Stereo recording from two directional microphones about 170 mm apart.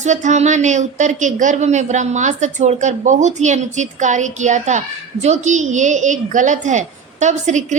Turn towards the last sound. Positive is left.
turn(degrees=-45)  # may be behind; listen again after turning